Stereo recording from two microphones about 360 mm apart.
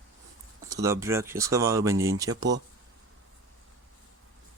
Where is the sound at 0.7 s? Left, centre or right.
Centre.